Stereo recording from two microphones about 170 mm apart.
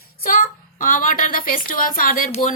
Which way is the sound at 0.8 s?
55° left (ahead or behind).